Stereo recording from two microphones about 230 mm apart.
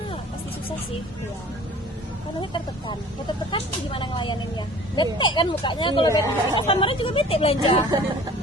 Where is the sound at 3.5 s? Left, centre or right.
Left.